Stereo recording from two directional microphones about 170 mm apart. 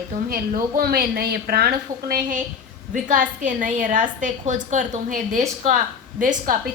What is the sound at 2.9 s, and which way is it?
A woman's voice, 50° right (ahead or behind).